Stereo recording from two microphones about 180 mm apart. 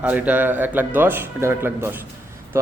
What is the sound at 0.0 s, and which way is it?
A man's voice, 10° right (ahead or behind).